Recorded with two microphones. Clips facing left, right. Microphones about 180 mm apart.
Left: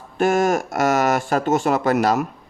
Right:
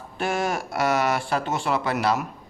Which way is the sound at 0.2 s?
45° left (ahead or behind).